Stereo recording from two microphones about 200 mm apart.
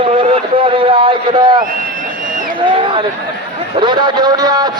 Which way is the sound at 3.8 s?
20° right (ahead or behind).